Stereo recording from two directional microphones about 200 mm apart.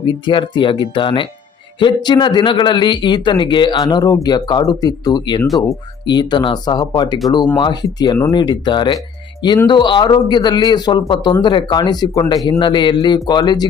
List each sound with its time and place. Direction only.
0.0 s speech: 25° left (ahead or behind)